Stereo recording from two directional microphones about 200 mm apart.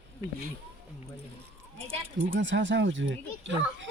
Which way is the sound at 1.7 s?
30° right (ahead or behind).